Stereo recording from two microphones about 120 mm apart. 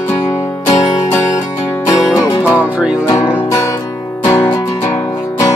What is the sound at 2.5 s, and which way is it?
Music, 10° right (ahead or behind).